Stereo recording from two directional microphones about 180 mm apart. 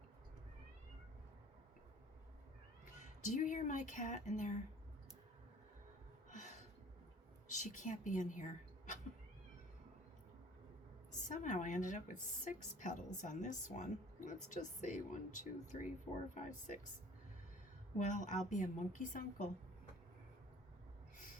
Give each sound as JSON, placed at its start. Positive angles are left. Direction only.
{"t": 2.9, "sound": "speech", "side_deg": 45}
{"t": 6.3, "sound": "a sound", "side_deg": 45}
{"t": 7.5, "sound": "a woman's voice", "side_deg": 45}
{"t": 11.3, "sound": "speech", "side_deg": 45}
{"t": 17.9, "sound": "speech", "side_deg": 45}